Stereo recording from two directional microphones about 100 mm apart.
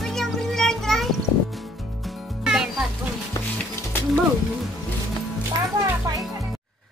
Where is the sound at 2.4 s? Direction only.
5° right (ahead or behind).